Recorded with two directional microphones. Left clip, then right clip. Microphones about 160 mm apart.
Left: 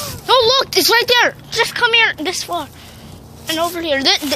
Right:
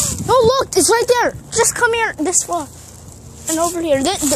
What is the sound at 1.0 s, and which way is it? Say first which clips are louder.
Speech: left 2 dB; 35° right (ahead or behind).